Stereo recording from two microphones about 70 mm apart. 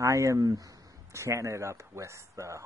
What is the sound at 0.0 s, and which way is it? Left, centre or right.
Speech, right.